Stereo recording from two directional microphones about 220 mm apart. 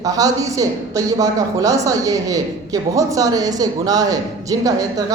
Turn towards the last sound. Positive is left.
turn(degrees=-15)  # may be behind; listen again after turning